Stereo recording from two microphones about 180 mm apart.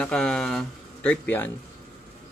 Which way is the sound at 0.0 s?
5° left (ahead or behind).